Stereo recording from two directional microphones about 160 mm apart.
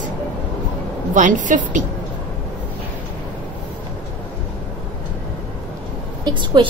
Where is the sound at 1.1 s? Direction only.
55° right (ahead or behind).